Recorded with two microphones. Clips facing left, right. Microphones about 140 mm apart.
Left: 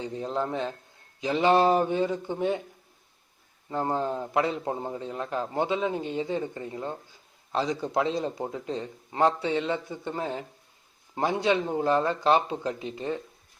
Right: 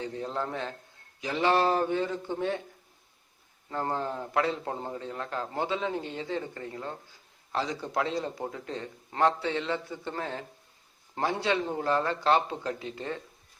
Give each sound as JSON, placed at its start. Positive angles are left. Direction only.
{"t": 0.0, "sound": "a man's voice", "side_deg": 20}
{"t": 3.7, "sound": "a man's voice", "side_deg": 15}